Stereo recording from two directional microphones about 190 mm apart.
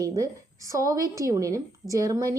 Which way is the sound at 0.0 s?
20° right (ahead or behind).